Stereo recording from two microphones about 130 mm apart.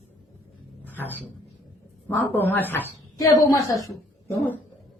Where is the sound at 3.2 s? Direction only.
25° left (ahead or behind).